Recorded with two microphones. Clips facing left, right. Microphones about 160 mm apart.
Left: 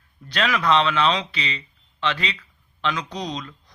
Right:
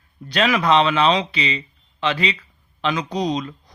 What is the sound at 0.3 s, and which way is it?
Speech, 15° right (ahead or behind).